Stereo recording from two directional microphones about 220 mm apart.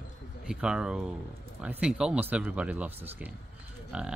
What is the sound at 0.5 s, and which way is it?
Speech, 5° right (ahead or behind).